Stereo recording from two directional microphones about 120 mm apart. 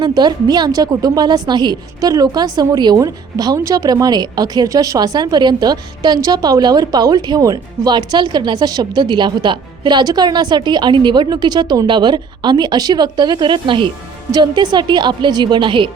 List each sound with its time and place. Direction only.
0.0 s a woman's voice: 35° right (ahead or behind)